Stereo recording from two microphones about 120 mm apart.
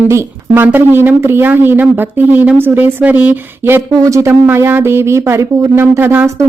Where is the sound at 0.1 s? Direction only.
20° right (ahead or behind).